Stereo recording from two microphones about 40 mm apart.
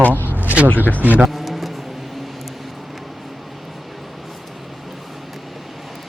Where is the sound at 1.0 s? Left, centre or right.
Right.